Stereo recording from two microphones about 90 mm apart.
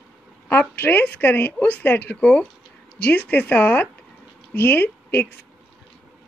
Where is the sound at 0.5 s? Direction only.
20° left (ahead or behind).